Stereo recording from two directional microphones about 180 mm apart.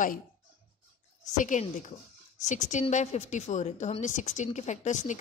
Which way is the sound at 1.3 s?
45° left (ahead or behind).